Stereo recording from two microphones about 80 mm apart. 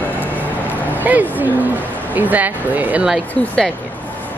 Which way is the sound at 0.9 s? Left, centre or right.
Right.